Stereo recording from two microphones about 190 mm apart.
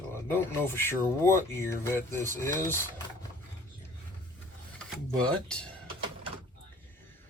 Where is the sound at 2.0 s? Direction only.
45° right (ahead or behind).